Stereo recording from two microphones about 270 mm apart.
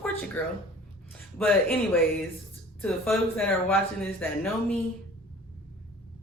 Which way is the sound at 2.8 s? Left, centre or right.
Centre.